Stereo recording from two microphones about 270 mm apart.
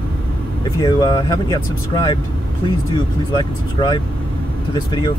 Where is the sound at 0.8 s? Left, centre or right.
Centre.